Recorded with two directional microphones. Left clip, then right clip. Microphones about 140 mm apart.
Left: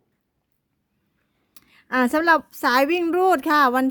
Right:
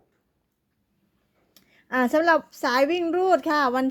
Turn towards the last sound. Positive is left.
turn(degrees=40)  # may be behind; listen again after turning